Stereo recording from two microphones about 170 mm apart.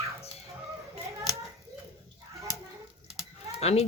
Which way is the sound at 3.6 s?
40° left (ahead or behind).